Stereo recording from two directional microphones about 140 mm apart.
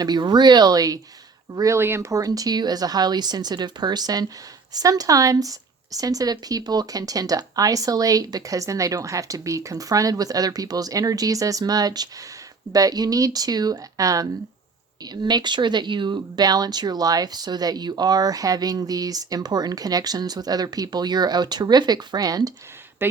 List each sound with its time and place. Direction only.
0.0 s speech: 30° right (ahead or behind)